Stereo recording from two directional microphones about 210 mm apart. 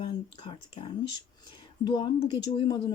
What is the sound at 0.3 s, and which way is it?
Speech, 25° left (ahead or behind).